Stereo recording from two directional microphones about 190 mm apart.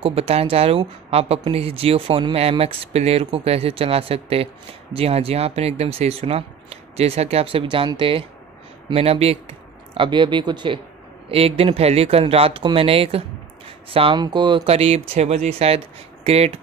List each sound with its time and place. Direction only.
0.0 s speech: 30° right (ahead or behind)